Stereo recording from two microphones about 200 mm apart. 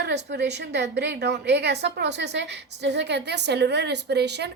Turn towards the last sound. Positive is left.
turn(degrees=-55)  # may be behind; listen again after turning